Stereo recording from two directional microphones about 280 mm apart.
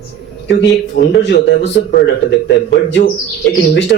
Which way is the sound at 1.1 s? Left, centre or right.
Left.